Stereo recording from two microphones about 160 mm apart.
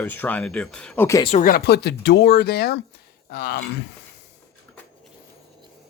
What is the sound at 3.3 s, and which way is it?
Speech, 75° left (ahead or behind).